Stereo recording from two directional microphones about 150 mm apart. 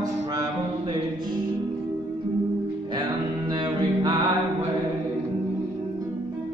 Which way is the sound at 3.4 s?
30° right (ahead or behind).